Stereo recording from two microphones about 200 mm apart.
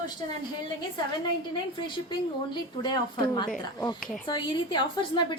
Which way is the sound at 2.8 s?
20° left (ahead or behind).